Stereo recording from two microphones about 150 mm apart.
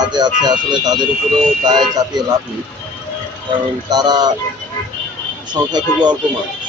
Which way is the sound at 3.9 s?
25° right (ahead or behind).